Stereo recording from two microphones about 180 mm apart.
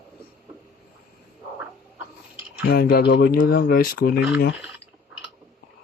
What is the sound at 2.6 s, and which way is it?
Speech, 60° left (ahead or behind).